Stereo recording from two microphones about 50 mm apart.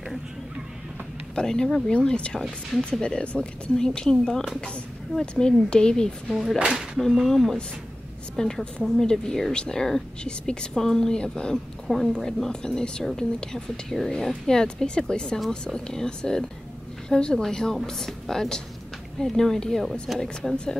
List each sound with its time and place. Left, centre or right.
1.3 s speech: centre
6.6 s speech: centre
7.2 s speech: centre
11.5 s a woman's voice: centre